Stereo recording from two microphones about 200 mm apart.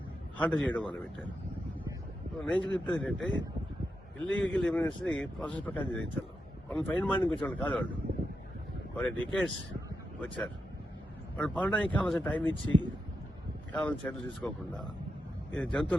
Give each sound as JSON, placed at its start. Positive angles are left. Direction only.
{"t": 0.3, "sound": "a man's voice", "side_deg": 5}
{"t": 2.4, "sound": "a man's voice", "side_deg": 5}
{"t": 9.0, "sound": "a man's voice", "side_deg": 5}
{"t": 13.7, "sound": "a man's voice", "side_deg": 5}